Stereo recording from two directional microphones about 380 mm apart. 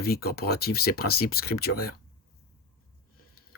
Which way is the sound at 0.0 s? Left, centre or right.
Left.